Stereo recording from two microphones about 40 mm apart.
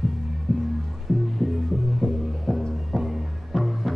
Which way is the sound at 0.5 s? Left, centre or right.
Centre.